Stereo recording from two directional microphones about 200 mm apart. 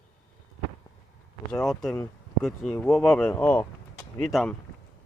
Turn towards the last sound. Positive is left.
turn(degrees=0)  # may be behind; listen again after turning